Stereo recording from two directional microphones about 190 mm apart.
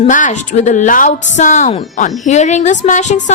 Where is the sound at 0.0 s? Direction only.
40° left (ahead or behind).